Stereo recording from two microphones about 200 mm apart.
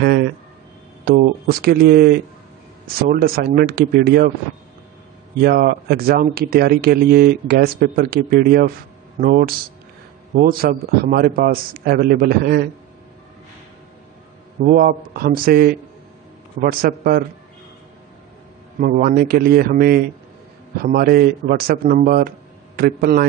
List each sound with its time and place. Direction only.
0.0 s speech: 55° right (ahead or behind)
5.4 s speech: 50° right (ahead or behind)
14.6 s speech: 45° right (ahead or behind)
16.8 s speech: 45° right (ahead or behind)
18.8 s speech: 45° right (ahead or behind)